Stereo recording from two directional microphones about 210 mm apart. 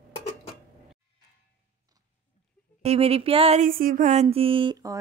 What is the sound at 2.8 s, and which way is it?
Speech, 30° right (ahead or behind).